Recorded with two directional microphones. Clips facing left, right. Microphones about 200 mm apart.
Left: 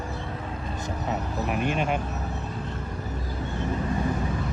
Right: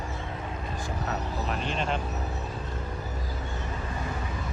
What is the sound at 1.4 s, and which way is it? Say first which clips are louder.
Speech: left 6 dB; 10° left (ahead or behind).